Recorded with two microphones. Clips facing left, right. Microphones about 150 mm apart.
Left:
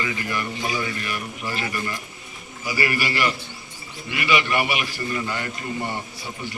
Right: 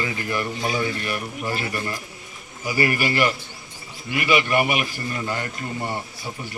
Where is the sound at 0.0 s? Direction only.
35° right (ahead or behind).